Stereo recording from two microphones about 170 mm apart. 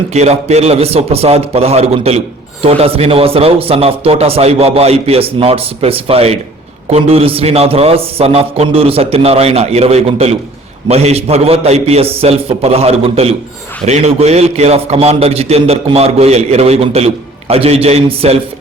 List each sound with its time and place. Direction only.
0.1 s a man's voice: 40° right (ahead or behind)